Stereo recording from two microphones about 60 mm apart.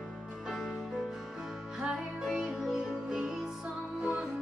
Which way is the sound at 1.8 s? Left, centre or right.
Centre.